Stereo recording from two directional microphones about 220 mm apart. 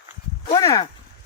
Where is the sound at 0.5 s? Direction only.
20° left (ahead or behind).